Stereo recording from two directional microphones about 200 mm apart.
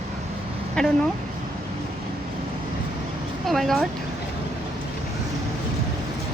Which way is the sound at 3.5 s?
Centre (ahead or behind).